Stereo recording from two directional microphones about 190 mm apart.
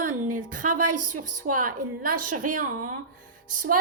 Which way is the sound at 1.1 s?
45° right (ahead or behind).